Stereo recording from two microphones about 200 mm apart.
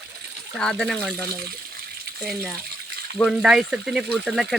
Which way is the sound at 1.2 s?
50° right (ahead or behind).